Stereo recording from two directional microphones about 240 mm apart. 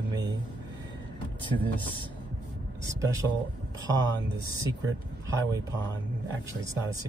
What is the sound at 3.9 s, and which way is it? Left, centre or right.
Speech, centre.